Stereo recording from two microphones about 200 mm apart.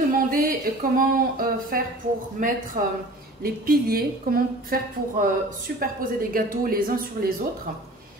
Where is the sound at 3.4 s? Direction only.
50° right (ahead or behind).